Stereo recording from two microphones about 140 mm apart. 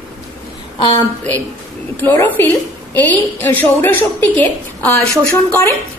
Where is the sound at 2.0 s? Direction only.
15° left (ahead or behind).